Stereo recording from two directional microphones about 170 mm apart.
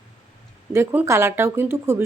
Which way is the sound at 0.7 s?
15° right (ahead or behind).